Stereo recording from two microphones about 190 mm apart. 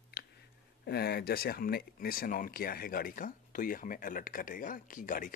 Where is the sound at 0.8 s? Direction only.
55° left (ahead or behind).